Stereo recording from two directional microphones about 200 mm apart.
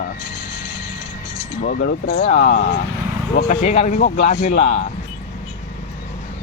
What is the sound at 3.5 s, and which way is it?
Speech, 40° left (ahead or behind).